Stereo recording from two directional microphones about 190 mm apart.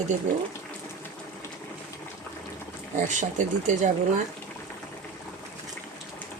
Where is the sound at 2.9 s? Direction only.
40° right (ahead or behind).